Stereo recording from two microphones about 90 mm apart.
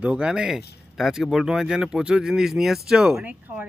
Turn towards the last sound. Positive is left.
turn(degrees=-20)  # may be behind; listen again after turning